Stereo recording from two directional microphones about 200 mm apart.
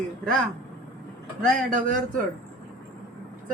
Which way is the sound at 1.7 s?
40° right (ahead or behind).